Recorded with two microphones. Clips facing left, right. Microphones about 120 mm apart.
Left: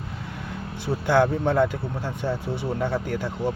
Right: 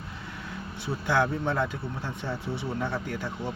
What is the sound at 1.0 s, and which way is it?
Speech, 55° left (ahead or behind).